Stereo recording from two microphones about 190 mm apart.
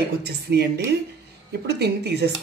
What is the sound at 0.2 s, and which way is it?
Speech, 60° right (ahead or behind).